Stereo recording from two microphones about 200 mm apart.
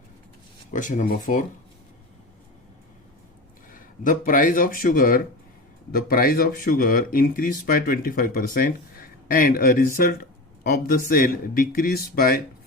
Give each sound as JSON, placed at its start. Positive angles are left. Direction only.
{"t": 0.7, "sound": "speech", "side_deg": 40}
{"t": 3.7, "sound": "speech", "side_deg": 40}